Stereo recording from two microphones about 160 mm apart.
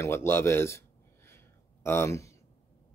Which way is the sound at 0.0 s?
15° left (ahead or behind).